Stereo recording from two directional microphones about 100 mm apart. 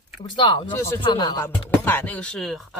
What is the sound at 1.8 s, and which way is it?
Speech, 20° left (ahead or behind).